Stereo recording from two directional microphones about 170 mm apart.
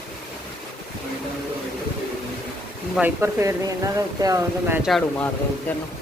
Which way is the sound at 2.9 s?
10° right (ahead or behind).